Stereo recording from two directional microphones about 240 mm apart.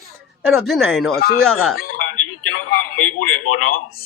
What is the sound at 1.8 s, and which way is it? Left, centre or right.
Speech, left.